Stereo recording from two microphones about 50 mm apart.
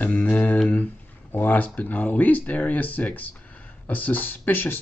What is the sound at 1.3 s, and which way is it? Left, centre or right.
Speech, left.